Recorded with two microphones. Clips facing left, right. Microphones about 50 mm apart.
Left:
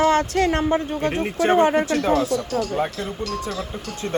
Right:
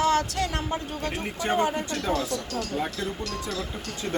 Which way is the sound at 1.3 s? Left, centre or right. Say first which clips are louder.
Left 8 dB; left.